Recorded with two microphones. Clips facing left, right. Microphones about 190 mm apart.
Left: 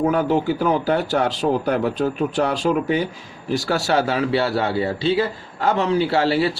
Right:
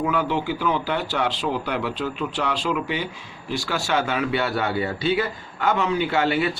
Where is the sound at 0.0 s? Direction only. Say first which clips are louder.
Left 5 dB; 40° left (ahead or behind).